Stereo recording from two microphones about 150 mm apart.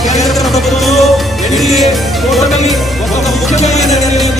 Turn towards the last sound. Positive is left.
turn(degrees=50)  # may be behind; listen again after turning